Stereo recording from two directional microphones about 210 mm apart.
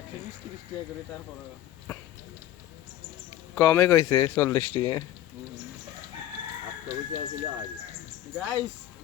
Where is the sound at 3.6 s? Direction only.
10° left (ahead or behind).